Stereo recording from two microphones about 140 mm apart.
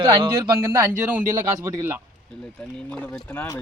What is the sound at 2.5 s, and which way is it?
Speech, 5° left (ahead or behind).